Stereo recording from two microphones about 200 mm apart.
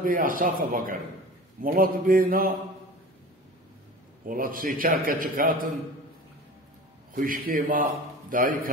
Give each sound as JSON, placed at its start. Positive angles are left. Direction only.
{"t": 0.0, "sound": "a man's voice", "side_deg": -45}
{"t": 4.3, "sound": "a man's voice", "side_deg": -45}
{"t": 7.2, "sound": "a man's voice", "side_deg": -45}